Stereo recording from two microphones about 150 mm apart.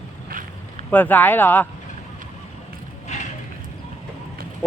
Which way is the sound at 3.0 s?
50° left (ahead or behind).